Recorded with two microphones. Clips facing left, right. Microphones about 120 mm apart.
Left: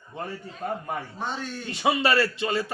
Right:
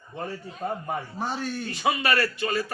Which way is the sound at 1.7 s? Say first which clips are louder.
Left 3 dB; 20° left (ahead or behind).